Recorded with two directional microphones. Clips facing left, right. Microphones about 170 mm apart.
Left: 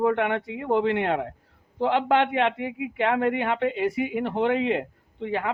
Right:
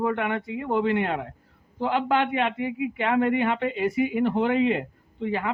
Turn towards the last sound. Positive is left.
turn(degrees=75)  # may be behind; listen again after turning